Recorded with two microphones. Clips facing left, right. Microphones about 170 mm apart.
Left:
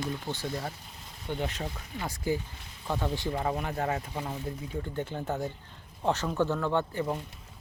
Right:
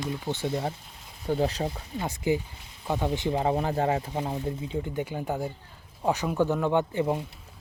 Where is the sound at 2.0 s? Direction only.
20° right (ahead or behind).